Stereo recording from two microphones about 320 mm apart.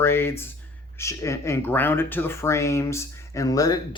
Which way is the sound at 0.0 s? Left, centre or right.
Centre.